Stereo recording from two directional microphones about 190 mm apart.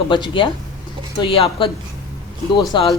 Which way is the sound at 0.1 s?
25° left (ahead or behind).